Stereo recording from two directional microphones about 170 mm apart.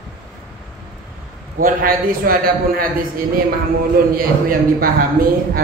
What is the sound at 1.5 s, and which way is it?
A man's voice, 55° right (ahead or behind).